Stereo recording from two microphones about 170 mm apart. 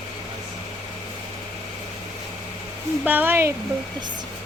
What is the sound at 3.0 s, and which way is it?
Speech, 10° right (ahead or behind).